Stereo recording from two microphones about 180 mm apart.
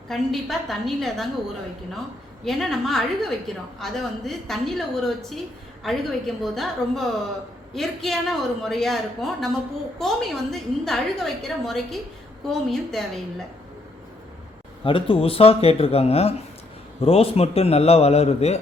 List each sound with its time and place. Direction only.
0.1 s a woman's voice: centre (ahead or behind)
2.4 s a woman's voice: centre (ahead or behind)
14.8 s a man's voice: 30° left (ahead or behind)